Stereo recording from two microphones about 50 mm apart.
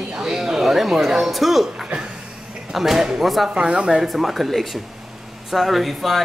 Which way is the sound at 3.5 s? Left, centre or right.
Centre.